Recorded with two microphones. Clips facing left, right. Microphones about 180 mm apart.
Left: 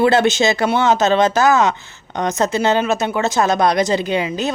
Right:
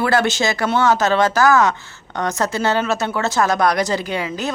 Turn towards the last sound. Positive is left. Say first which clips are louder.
# left 4 dB
turn(degrees=20)  # may be behind; listen again after turning